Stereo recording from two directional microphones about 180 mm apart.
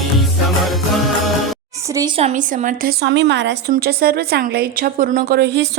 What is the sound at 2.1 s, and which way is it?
Speech, 40° right (ahead or behind).